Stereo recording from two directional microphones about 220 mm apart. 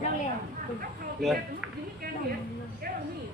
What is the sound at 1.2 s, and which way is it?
Whip, centre (ahead or behind).